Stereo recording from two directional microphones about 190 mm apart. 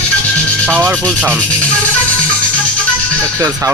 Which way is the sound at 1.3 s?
5° left (ahead or behind).